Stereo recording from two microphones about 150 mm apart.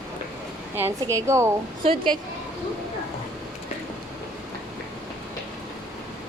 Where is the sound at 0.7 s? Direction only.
20° right (ahead or behind).